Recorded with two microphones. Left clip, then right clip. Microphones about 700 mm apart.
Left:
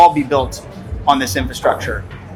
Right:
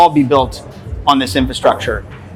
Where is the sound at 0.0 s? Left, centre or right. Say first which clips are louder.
Right 1 dB; right.